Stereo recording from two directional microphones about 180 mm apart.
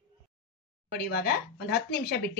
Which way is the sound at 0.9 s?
60° left (ahead or behind).